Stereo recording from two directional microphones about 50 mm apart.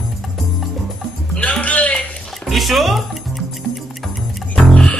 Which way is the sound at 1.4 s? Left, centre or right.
Left.